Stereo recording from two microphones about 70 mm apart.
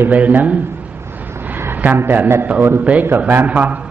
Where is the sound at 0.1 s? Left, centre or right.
Right.